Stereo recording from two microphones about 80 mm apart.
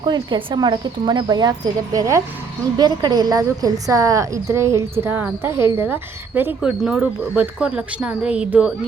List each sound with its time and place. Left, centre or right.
0.0 s speech: right
2.7 s a woman's voice: right
6.6 s a woman's voice: centre